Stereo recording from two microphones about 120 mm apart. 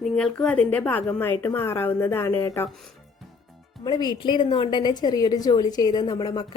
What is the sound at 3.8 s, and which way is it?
A woman's voice, 35° left (ahead or behind).